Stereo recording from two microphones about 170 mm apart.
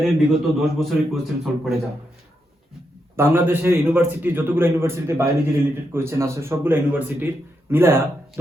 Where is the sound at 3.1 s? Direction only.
15° right (ahead or behind).